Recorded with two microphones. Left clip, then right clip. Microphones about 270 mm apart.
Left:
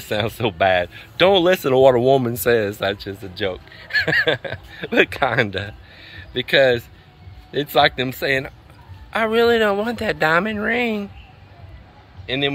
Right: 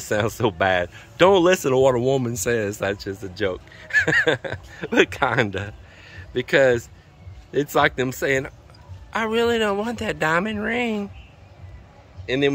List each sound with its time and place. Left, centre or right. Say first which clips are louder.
0.1 s speech: even; centre
12.3 s speech: right 1 dB; centre